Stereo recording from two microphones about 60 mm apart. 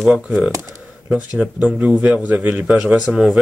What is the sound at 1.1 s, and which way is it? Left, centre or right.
Speech, right.